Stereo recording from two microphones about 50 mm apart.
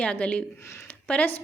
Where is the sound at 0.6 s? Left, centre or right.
Left.